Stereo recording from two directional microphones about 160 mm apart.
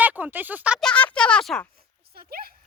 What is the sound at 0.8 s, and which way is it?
Speech, 10° left (ahead or behind).